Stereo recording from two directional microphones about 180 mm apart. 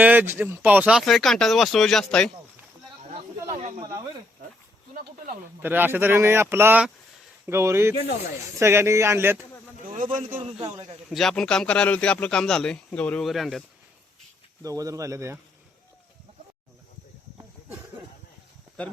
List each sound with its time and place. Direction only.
0.0 s a man's voice: 10° right (ahead or behind)
3.5 s a man's voice: 45° right (ahead or behind)
3.8 s speech: 20° right (ahead or behind)
5.6 s speech: 10° right (ahead or behind)
10.2 s a man's voice: 45° right (ahead or behind)
11.1 s a man's voice: centre (ahead or behind)
14.6 s speech: 20° right (ahead or behind)